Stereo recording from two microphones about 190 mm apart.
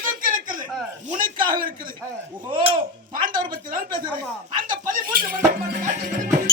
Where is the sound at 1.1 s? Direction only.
50° right (ahead or behind).